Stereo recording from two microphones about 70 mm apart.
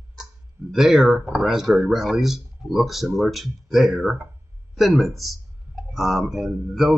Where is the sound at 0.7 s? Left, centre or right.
Centre.